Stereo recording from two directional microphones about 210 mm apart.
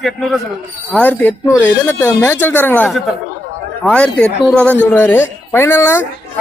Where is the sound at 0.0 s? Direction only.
Centre (ahead or behind).